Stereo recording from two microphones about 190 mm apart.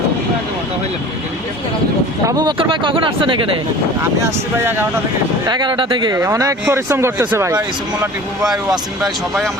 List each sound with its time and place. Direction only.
2.2 s speech: 20° right (ahead or behind)
4.2 s speech: 15° right (ahead or behind)
5.5 s speech: 25° right (ahead or behind)